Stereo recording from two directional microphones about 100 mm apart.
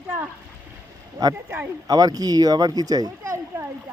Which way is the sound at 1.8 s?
40° right (ahead or behind).